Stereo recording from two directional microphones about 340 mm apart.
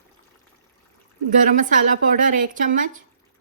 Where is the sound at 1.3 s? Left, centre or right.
Right.